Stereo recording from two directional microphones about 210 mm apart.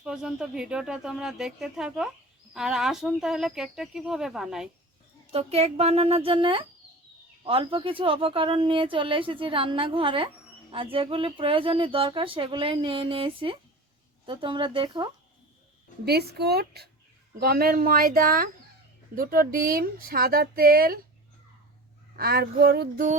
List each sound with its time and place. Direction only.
0.0 s speech: 5° right (ahead or behind)
5.3 s speech: 30° right (ahead or behind)
16.0 s speech: 50° right (ahead or behind)
22.1 s speech: 45° right (ahead or behind)